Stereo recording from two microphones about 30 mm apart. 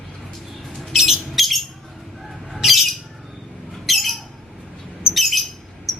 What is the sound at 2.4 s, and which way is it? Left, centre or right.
Bird, centre.